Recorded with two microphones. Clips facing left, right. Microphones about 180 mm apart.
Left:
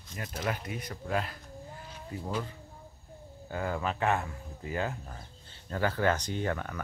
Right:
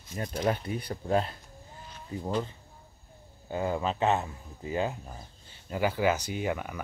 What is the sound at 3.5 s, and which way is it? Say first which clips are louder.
Speech: right 3 dB; 20° right (ahead or behind).